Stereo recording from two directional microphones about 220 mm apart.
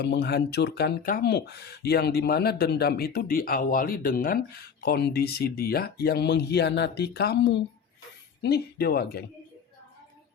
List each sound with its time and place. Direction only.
0.0 s speech: 50° left (ahead or behind)